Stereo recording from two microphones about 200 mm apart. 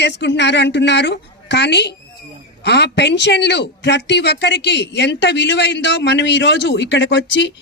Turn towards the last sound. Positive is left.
turn(degrees=60)  # may be behind; listen again after turning